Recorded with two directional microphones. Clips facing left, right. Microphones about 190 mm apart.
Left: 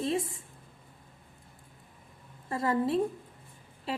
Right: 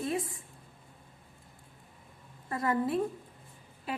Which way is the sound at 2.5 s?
30° left (ahead or behind).